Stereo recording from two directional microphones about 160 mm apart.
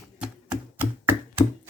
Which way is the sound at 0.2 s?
5° right (ahead or behind).